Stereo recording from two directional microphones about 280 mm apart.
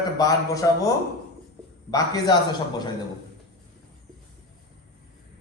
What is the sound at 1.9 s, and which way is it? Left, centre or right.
A man's voice, centre.